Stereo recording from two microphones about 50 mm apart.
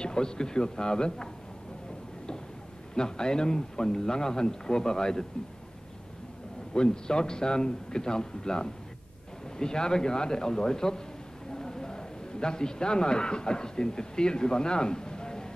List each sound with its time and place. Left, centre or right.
0.0 s a man's voice: centre
3.0 s a man's voice: centre
6.7 s a man's voice: centre